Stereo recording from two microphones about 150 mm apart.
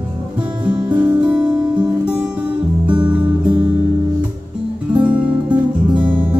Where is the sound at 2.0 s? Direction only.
5° right (ahead or behind).